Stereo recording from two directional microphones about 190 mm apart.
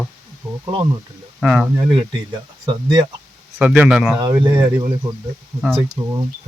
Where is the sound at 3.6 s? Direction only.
5° right (ahead or behind).